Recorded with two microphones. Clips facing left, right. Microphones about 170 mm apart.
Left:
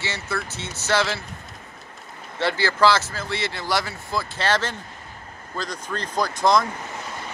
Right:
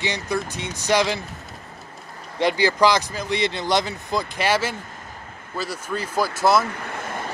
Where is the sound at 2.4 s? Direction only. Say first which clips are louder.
Right 2 dB; 15° right (ahead or behind).